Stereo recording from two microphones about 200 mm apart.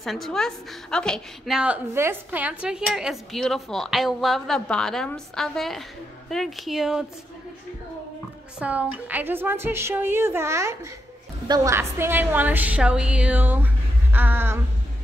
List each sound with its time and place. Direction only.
0.0 s a woman's voice: centre (ahead or behind)
8.5 s a woman's voice: 5° right (ahead or behind)
14.1 s a sound: 10° right (ahead or behind)